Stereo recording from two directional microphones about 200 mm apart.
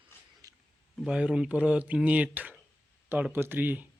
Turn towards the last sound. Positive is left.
turn(degrees=-10)  # may be behind; listen again after turning